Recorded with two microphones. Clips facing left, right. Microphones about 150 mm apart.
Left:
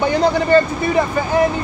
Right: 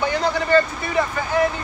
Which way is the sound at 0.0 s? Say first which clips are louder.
Left 6 dB; 20° left (ahead or behind).